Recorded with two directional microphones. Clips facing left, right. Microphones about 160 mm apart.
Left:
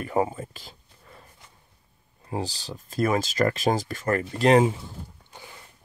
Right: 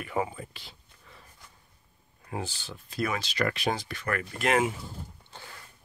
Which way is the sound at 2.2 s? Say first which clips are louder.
Left 5 dB; 35° left (ahead or behind).